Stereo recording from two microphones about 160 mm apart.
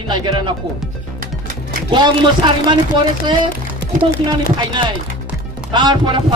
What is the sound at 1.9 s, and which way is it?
Speech, 30° right (ahead or behind).